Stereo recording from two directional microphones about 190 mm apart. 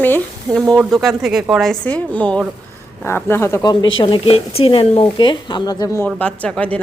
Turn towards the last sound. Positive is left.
turn(degrees=5)  # may be behind; listen again after turning